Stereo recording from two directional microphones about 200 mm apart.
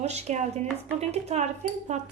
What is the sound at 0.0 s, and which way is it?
Speech, 35° right (ahead or behind).